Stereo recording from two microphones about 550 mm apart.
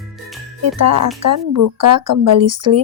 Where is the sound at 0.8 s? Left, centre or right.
Right.